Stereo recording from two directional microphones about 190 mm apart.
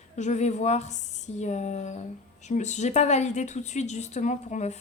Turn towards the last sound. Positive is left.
turn(degrees=40)  # may be behind; listen again after turning